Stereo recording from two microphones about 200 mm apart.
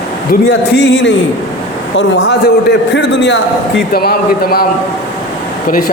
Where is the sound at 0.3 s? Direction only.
60° left (ahead or behind).